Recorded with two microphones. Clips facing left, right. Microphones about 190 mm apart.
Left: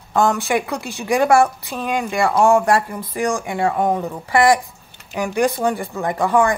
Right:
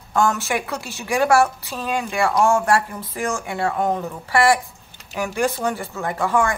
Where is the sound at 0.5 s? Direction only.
15° left (ahead or behind).